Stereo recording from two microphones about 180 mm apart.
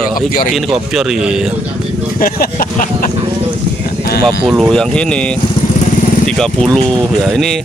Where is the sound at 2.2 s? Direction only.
55° left (ahead or behind).